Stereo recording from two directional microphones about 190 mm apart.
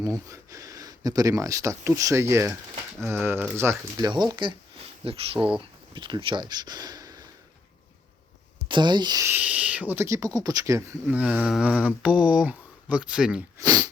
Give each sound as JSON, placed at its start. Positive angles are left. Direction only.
{"t": 0.0, "sound": "speech", "side_deg": -15}
{"t": 4.1, "sound": "speech", "side_deg": -25}
{"t": 8.6, "sound": "speech", "side_deg": -25}
{"t": 13.6, "sound": "speech", "side_deg": -20}